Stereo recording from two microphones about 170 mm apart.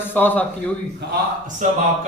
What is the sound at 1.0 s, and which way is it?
Speech, 80° right.